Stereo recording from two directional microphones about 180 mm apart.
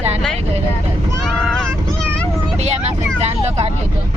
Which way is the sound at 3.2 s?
35° right (ahead or behind).